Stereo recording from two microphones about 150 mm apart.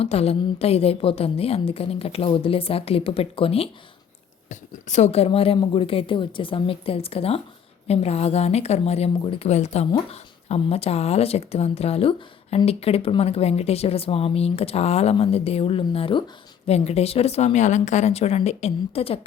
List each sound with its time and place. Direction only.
0.0 s a woman's voice: 40° left (ahead or behind)
4.4 s a woman's voice: 50° left (ahead or behind)